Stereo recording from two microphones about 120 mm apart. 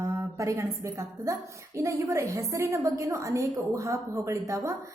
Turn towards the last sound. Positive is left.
turn(degrees=-25)  # may be behind; listen again after turning